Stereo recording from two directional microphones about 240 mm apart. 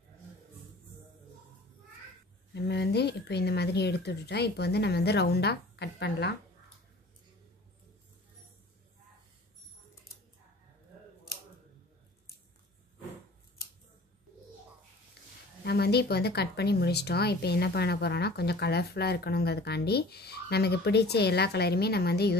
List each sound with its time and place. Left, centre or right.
2.5 s speech: left
15.6 s speech: left